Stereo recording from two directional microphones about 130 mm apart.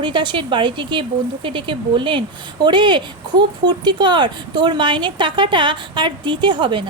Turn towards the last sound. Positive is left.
turn(degrees=-35)  # may be behind; listen again after turning